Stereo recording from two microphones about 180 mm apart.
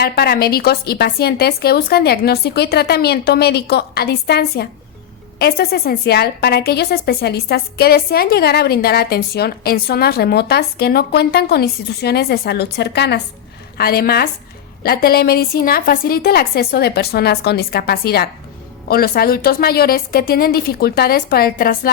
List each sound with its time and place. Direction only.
0.0 s a woman's voice: 60° left (ahead or behind)